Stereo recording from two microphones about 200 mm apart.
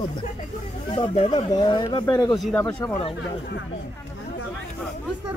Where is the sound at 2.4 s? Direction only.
5° left (ahead or behind).